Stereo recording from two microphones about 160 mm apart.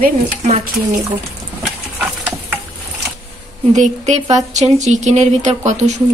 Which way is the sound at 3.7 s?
50° right (ahead or behind).